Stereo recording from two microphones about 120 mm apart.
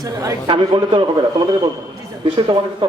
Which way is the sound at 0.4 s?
40° right (ahead or behind).